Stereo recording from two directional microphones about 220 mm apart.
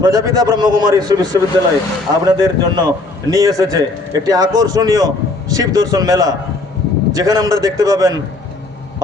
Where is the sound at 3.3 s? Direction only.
15° right (ahead or behind).